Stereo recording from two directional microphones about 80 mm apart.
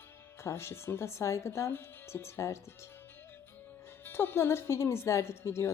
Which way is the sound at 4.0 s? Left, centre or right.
Left.